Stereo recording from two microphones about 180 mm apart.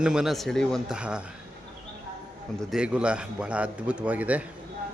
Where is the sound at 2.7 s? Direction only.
5° right (ahead or behind).